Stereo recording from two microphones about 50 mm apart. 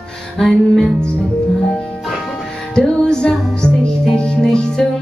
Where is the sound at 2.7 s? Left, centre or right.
Centre.